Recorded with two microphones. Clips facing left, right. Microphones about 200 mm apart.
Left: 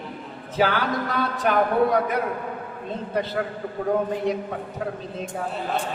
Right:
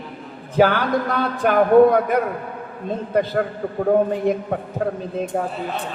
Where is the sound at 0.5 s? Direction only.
50° right (ahead or behind).